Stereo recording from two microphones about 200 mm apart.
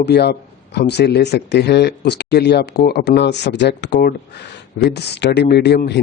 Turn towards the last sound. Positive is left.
turn(degrees=55)  # may be behind; listen again after turning